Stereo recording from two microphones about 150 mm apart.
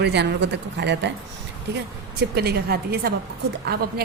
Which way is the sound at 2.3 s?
90° right.